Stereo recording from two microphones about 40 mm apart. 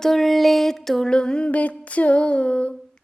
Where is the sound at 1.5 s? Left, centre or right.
Left.